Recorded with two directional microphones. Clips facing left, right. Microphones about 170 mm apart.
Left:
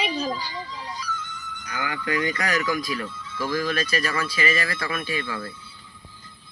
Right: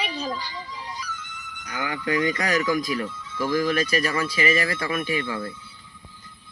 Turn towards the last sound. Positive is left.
turn(degrees=-20)  # may be behind; listen again after turning